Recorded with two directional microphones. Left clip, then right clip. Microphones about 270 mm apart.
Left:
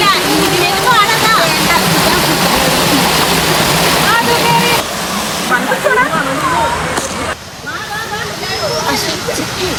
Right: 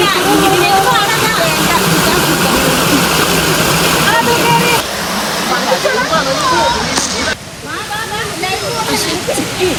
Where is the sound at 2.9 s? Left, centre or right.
Left.